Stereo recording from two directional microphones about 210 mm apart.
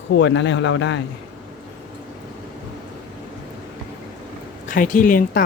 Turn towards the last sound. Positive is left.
turn(degrees=40)  # may be behind; listen again after turning